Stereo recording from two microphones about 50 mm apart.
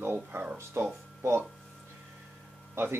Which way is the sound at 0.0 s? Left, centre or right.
Right.